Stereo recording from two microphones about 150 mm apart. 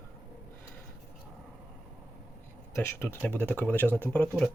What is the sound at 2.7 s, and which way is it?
Speech, 15° left (ahead or behind).